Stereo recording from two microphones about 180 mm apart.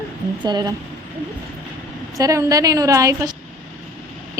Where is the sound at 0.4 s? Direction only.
25° right (ahead or behind).